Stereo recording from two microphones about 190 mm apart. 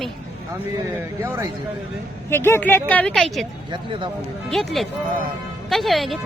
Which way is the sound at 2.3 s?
10° left (ahead or behind).